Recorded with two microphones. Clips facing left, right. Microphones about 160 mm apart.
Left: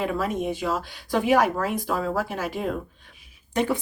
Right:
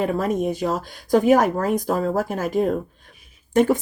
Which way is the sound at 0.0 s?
45° right (ahead or behind).